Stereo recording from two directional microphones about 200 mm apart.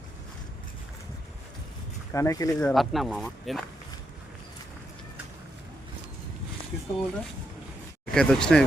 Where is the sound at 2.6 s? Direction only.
Centre (ahead or behind).